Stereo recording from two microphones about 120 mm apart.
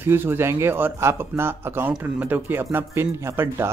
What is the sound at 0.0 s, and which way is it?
A man's voice, 15° right (ahead or behind).